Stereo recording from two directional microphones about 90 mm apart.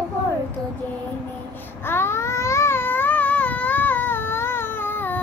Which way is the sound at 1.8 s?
25° left (ahead or behind).